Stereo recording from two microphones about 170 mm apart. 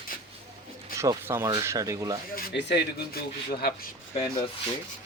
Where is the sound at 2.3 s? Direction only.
75° left (ahead or behind).